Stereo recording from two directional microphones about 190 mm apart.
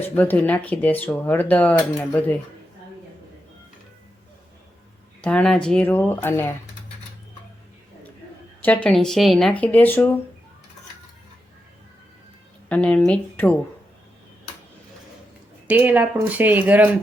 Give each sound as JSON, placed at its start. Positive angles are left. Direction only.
{"t": 0.2, "sound": "speech", "side_deg": 10}
{"t": 5.2, "sound": "speech", "side_deg": 5}
{"t": 8.6, "sound": "speech", "side_deg": 5}
{"t": 12.6, "sound": "speech", "side_deg": 10}
{"t": 15.6, "sound": "speech", "side_deg": -10}